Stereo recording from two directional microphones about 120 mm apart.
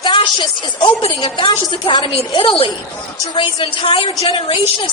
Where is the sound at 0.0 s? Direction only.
45° left (ahead or behind).